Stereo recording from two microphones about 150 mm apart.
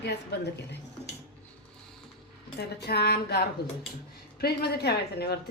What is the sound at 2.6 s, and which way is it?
A woman's voice, 90° left.